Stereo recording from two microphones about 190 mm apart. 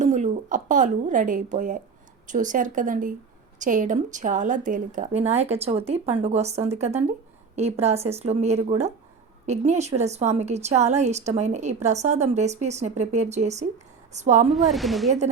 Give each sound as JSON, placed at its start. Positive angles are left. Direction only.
{"t": 0.0, "sound": "a woman's voice", "side_deg": -40}
{"t": 14.5, "sound": "speech", "side_deg": 0}